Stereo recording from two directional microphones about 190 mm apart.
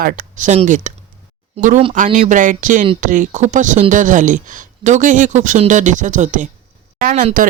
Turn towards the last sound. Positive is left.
turn(degrees=-45)  # may be behind; listen again after turning